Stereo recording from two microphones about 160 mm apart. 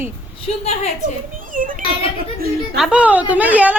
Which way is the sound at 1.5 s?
60° right (ahead or behind).